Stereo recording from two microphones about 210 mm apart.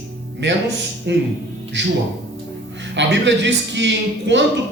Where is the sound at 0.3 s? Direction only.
55° right (ahead or behind).